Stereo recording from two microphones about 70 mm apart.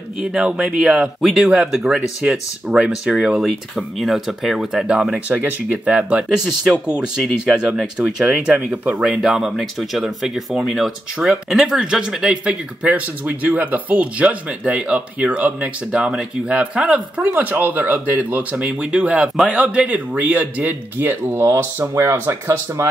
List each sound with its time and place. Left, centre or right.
0.2 s speech: centre
5.3 s speech: right
9.5 s speech: centre
12.8 s speech: right
21.4 s speech: right